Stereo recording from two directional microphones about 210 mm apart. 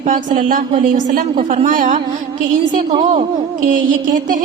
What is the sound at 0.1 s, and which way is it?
A woman's voice, 40° right (ahead or behind).